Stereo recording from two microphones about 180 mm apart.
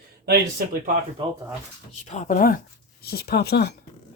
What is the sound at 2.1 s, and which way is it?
Speech, 40° left (ahead or behind).